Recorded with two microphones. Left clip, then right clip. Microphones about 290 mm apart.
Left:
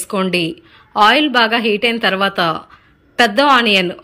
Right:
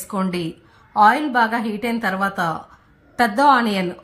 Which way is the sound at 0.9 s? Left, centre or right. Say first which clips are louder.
Left 3 dB; centre.